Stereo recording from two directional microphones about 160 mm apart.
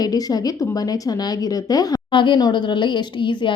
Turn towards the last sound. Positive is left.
turn(degrees=30)  # may be behind; listen again after turning